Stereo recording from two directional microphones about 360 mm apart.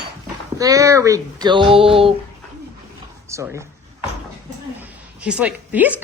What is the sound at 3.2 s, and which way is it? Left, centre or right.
Speech, centre.